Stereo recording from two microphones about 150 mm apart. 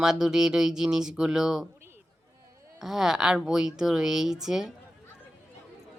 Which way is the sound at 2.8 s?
Centre (ahead or behind).